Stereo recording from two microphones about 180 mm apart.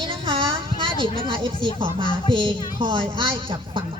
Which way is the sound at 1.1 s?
30° right (ahead or behind).